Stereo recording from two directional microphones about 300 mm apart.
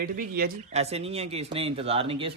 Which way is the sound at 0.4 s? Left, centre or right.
Right.